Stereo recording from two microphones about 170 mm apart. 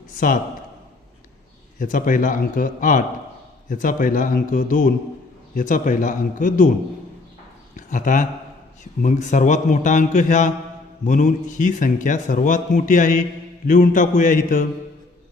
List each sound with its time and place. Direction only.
1.8 s a man's voice: 50° left (ahead or behind)
7.8 s a man's voice: 50° left (ahead or behind)